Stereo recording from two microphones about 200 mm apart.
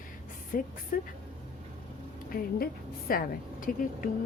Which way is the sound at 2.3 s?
50° left (ahead or behind).